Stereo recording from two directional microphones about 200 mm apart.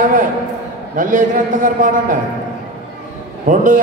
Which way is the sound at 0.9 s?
40° right (ahead or behind).